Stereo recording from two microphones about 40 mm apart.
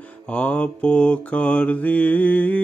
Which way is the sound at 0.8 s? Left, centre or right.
Left.